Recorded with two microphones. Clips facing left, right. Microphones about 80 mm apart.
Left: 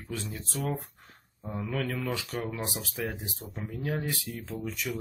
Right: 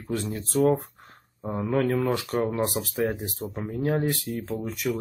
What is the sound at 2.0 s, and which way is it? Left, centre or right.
Speech, right.